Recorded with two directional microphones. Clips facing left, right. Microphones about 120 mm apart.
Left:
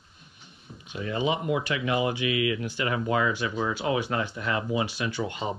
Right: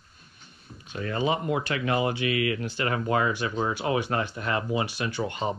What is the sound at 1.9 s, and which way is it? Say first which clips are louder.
Speech: even; 20° left (ahead or behind).